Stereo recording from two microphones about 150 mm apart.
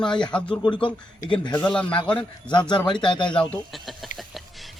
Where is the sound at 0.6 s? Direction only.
30° left (ahead or behind).